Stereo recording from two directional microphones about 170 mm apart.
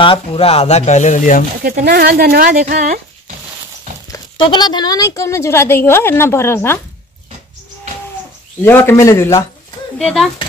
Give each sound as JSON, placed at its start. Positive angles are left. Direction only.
{"t": 0.0, "sound": "speech", "side_deg": 35}
{"t": 1.9, "sound": "speech", "side_deg": -65}
{"t": 4.1, "sound": "speech", "side_deg": 25}
{"t": 8.6, "sound": "speech", "side_deg": 15}
{"t": 9.9, "sound": "speech", "side_deg": 0}